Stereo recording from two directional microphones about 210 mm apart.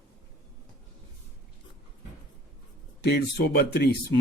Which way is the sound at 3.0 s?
50° left (ahead or behind).